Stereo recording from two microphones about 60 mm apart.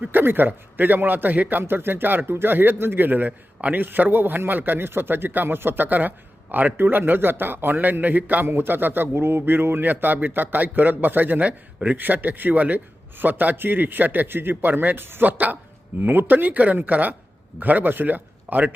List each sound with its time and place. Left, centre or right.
0.0 s a man's voice: right